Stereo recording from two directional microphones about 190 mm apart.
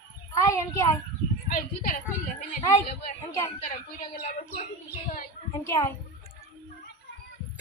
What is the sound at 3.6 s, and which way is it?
Speech, 40° left (ahead or behind).